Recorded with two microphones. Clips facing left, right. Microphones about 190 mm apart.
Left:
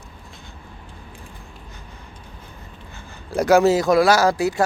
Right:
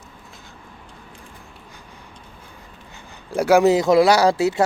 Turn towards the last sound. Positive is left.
turn(degrees=-25)  # may be behind; listen again after turning